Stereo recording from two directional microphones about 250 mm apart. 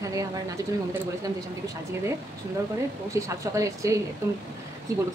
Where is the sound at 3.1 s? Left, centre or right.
Centre.